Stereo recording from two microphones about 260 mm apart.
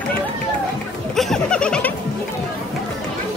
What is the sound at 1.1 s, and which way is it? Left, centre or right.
Music, centre.